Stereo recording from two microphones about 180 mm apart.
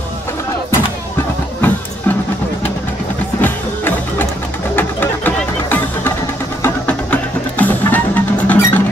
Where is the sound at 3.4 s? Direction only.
10° left (ahead or behind).